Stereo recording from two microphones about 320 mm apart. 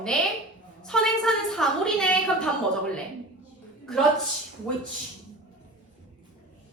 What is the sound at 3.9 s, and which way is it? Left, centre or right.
Speech, centre.